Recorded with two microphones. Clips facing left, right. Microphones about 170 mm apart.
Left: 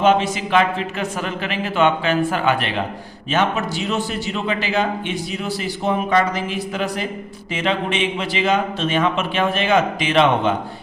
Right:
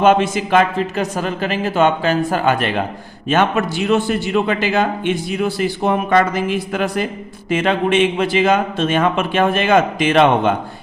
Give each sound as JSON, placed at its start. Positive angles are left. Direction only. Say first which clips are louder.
{"t": 0.0, "sound": "a man's voice", "louder": "right 3 dB", "side_deg": -50}